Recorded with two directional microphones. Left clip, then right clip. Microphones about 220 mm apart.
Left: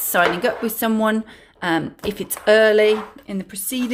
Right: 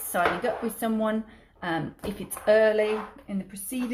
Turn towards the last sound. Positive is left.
turn(degrees=45)  # may be behind; listen again after turning